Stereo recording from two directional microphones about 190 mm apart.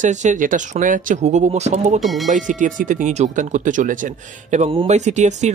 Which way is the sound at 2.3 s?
40° right (ahead or behind).